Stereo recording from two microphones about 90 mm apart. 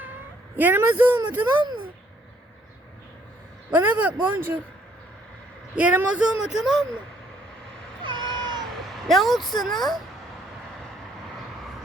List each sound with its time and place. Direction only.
0.5 s a woman's voice: 20° right (ahead or behind)
3.7 s a man's voice: 20° right (ahead or behind)
5.7 s speech: 15° right (ahead or behind)
6.4 s speech: 5° right (ahead or behind)
8.0 s cat: 60° right (ahead or behind)
9.0 s speech: centre (ahead or behind)